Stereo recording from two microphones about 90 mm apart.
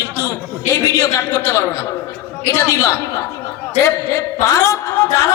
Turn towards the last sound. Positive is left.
turn(degrees=40)  # may be behind; listen again after turning